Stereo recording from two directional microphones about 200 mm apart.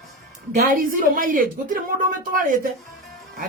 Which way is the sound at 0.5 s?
45° right (ahead or behind).